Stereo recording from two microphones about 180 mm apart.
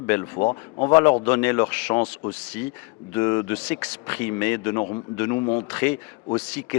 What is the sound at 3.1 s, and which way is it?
Speech, 15° left (ahead or behind).